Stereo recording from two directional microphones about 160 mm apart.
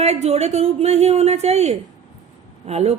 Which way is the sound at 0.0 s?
45° right (ahead or behind).